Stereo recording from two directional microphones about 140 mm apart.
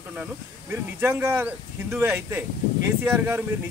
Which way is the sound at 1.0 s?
15° right (ahead or behind).